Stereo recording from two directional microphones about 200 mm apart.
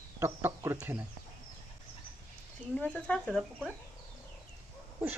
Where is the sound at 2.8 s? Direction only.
5° left (ahead or behind).